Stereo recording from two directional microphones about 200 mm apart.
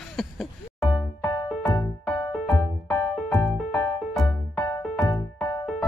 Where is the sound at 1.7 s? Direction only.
20° left (ahead or behind).